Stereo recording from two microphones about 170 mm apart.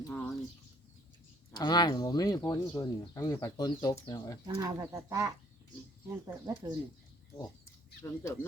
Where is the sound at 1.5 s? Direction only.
25° left (ahead or behind).